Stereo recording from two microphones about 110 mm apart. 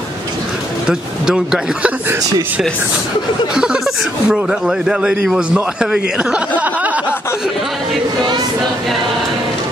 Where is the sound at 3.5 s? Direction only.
5° right (ahead or behind).